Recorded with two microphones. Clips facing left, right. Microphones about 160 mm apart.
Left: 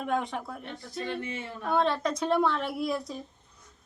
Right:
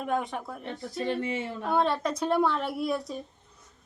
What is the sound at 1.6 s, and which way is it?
A woman's voice, centre (ahead or behind).